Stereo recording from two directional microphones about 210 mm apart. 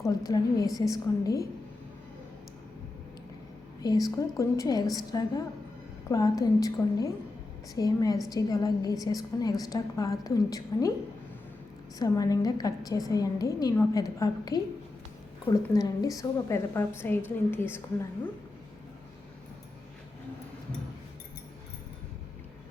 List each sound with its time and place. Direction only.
0.0 s a woman's voice: 15° left (ahead or behind)
3.8 s a woman's voice: 15° left (ahead or behind)
11.9 s a woman's voice: 15° left (ahead or behind)